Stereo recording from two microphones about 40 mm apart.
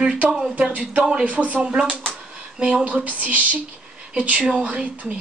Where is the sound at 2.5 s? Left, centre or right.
Right.